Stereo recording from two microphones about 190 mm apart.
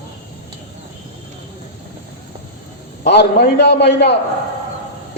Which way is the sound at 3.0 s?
60° left (ahead or behind).